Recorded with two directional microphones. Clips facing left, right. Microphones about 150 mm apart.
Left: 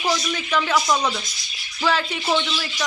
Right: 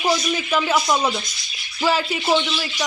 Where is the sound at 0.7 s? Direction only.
25° right (ahead or behind).